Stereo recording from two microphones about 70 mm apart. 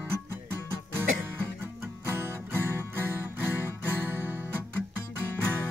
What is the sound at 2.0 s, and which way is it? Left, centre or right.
Music, right.